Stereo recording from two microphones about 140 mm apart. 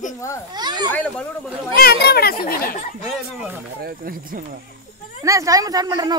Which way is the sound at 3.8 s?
90° right.